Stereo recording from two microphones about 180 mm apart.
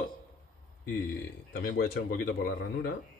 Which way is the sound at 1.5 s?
50° left (ahead or behind).